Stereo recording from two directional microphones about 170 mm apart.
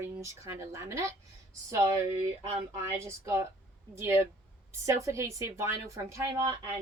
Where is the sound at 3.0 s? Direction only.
15° right (ahead or behind).